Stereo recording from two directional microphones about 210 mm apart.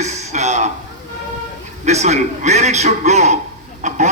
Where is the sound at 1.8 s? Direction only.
30° right (ahead or behind).